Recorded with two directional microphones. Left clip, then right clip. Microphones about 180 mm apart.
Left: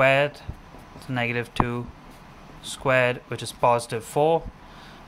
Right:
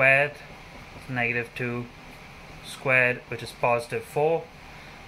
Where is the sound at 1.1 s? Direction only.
40° left (ahead or behind).